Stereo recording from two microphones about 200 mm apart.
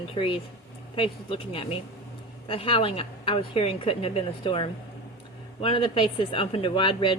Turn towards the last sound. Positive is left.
turn(degrees=25)  # may be behind; listen again after turning